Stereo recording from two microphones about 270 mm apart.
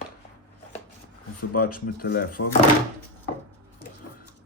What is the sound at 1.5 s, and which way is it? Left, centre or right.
Speech, left.